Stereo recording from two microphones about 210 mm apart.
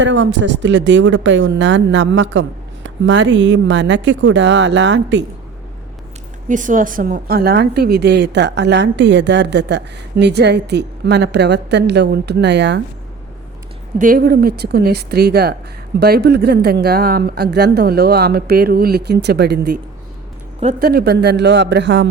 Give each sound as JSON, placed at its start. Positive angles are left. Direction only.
{"t": 0.0, "sound": "speech", "side_deg": -60}
{"t": 6.5, "sound": "speech", "side_deg": -40}
{"t": 14.0, "sound": "speech", "side_deg": -45}